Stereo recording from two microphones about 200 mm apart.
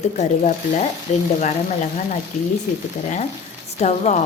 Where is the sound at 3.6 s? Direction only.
35° left (ahead or behind).